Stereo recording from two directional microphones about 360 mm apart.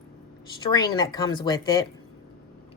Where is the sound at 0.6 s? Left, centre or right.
Centre.